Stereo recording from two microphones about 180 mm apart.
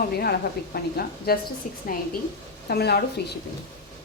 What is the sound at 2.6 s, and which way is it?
Speech, 65° left (ahead or behind).